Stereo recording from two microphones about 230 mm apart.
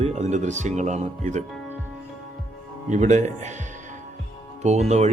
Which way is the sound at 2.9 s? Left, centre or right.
Right.